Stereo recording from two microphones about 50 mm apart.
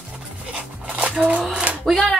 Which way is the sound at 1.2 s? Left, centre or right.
Centre.